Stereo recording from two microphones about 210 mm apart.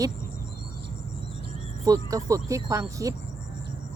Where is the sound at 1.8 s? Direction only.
15° right (ahead or behind).